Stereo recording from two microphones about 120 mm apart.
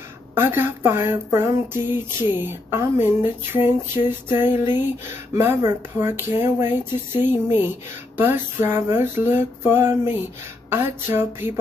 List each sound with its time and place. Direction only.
0.3 s speech: 20° right (ahead or behind)